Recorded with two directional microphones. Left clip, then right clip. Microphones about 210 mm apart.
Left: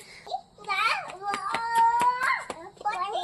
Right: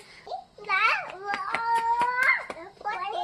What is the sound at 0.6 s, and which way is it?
Babbling, 10° right (ahead or behind).